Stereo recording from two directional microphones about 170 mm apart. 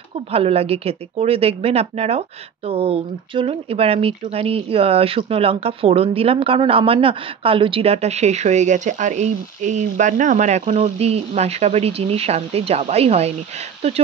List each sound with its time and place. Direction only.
0.3 s speech: 35° right (ahead or behind)